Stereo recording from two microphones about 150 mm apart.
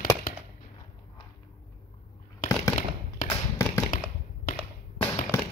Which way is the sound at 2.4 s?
65° left (ahead or behind).